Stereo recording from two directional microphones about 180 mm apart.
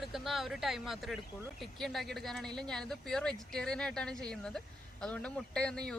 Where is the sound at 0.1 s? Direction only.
Centre (ahead or behind).